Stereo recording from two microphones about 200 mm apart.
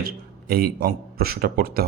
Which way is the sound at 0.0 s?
50° right (ahead or behind).